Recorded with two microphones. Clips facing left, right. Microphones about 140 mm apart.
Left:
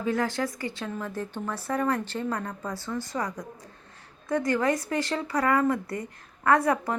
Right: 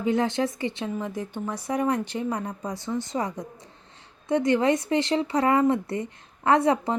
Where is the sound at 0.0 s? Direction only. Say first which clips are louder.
Right 3 dB; 20° right (ahead or behind).